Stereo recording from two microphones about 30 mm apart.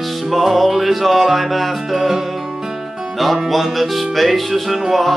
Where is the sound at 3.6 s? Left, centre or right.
Centre.